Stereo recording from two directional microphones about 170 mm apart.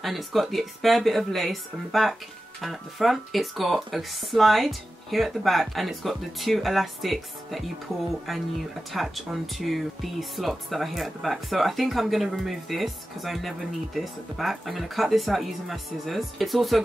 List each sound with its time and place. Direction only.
0.0 s speech: centre (ahead or behind)
8.9 s speech: centre (ahead or behind)